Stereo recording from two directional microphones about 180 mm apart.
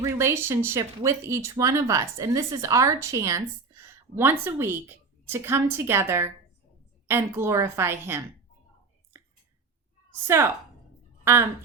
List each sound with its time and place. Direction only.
0.0 s speech: 15° right (ahead or behind)
10.2 s speech: 15° right (ahead or behind)